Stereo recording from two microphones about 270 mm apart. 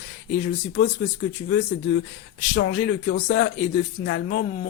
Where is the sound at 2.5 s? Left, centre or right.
Left.